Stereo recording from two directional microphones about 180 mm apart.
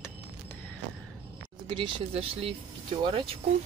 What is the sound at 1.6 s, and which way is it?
Speech, 30° right (ahead or behind).